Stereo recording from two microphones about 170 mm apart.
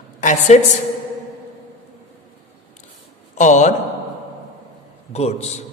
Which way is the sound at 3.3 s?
45° left (ahead or behind).